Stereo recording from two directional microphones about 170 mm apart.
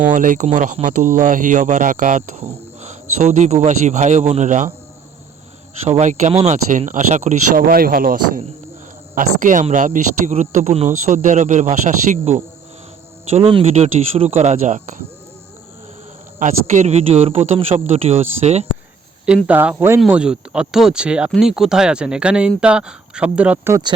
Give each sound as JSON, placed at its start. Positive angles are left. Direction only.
{"t": 0.1, "sound": "speech", "side_deg": -50}
{"t": 5.9, "sound": "speech", "side_deg": -45}
{"t": 13.3, "sound": "speech", "side_deg": -35}
{"t": 16.4, "sound": "speech", "side_deg": -45}
{"t": 19.5, "sound": "speech", "side_deg": -10}